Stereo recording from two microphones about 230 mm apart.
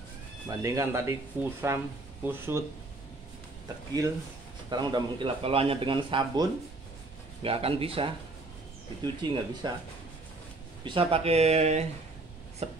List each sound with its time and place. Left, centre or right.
0.5 s speech: centre
3.6 s speech: centre
7.4 s speech: right
10.8 s speech: right